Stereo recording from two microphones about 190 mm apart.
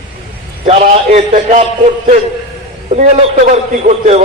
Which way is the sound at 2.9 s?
40° right (ahead or behind).